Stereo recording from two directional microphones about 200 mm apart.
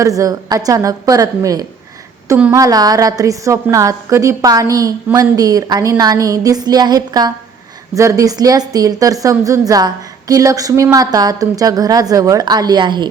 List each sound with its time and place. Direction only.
0.0 s a woman's voice: 15° right (ahead or behind)